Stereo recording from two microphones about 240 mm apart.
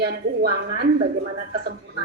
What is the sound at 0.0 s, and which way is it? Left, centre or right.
Speech, right.